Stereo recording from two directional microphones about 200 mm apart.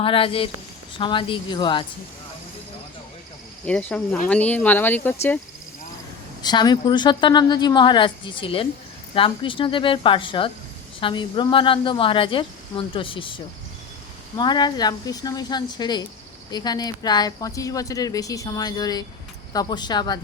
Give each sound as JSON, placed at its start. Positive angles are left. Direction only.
{"t": 0.0, "sound": "a woman's voice", "side_deg": 25}
{"t": 3.7, "sound": "speech", "side_deg": 5}
{"t": 6.4, "sound": "a woman's voice", "side_deg": 20}